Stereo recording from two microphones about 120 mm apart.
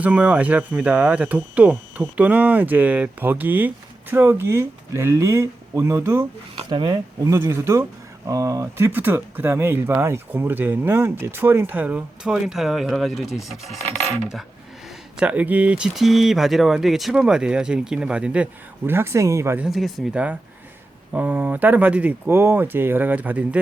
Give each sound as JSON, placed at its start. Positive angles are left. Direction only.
{"t": 0.0, "sound": "speech", "side_deg": -10}
{"t": 6.7, "sound": "speech", "side_deg": -40}
{"t": 7.3, "sound": "speech", "side_deg": -20}
{"t": 15.2, "sound": "speech", "side_deg": -10}
{"t": 18.9, "sound": "speech", "side_deg": -20}
{"t": 19.5, "sound": "speech", "side_deg": -5}
{"t": 21.1, "sound": "speech", "side_deg": -15}